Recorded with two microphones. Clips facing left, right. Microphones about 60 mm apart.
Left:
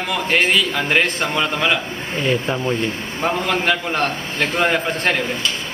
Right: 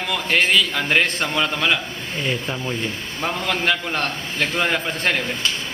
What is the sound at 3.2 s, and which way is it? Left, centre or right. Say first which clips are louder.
A man's voice: left 3 dB; centre.